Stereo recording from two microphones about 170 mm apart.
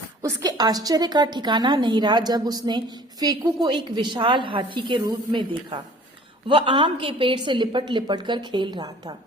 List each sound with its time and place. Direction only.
0.2 s a woman's voice: 20° right (ahead or behind)